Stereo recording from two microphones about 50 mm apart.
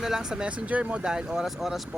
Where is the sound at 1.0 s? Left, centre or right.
Centre.